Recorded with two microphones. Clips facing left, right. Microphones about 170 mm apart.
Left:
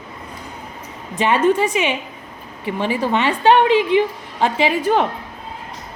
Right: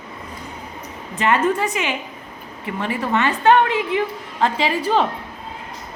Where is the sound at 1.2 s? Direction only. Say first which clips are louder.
Left 3 dB; 20° left (ahead or behind).